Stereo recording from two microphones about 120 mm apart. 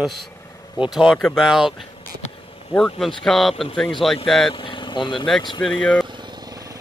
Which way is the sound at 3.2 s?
Centre (ahead or behind).